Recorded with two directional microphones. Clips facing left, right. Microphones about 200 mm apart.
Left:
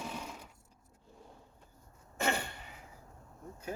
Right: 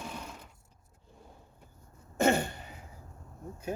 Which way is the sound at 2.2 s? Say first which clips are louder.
Right 8 dB; 45° right (ahead or behind).